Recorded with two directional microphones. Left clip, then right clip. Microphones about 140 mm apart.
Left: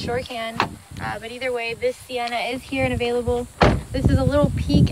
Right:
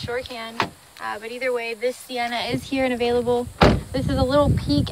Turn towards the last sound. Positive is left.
turn(degrees=-50)  # may be behind; listen again after turning